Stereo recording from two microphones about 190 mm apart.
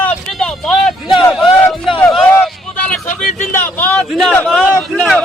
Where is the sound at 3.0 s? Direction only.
40° left (ahead or behind).